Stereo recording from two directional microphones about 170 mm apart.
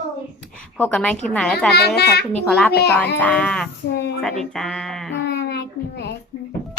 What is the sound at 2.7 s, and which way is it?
Speech, 70° left (ahead or behind).